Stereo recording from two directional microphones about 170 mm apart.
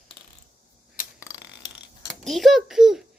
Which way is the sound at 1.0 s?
55° left (ahead or behind).